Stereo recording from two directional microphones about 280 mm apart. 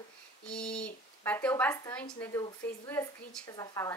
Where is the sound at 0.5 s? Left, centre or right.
Centre.